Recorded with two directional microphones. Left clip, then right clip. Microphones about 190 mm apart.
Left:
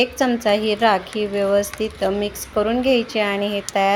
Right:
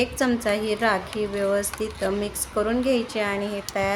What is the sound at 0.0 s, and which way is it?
A woman's voice, 10° left (ahead or behind).